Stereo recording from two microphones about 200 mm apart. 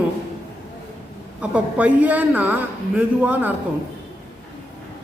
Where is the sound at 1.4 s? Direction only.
5° right (ahead or behind).